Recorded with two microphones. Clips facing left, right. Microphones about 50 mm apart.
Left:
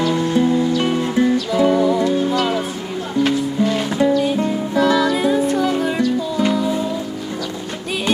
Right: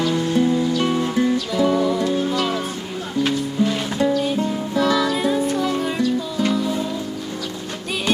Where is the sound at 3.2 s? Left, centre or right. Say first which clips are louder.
Left 2 dB; left.